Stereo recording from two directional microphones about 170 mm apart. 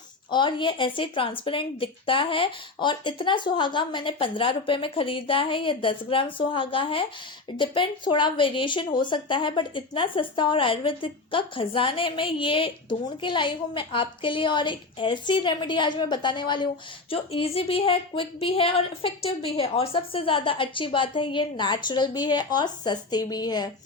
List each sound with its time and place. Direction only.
0.3 s speech: 25° left (ahead or behind)